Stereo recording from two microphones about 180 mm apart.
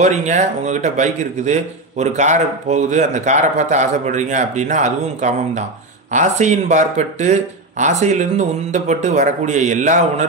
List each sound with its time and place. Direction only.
0.0 s a man's voice: 40° right (ahead or behind)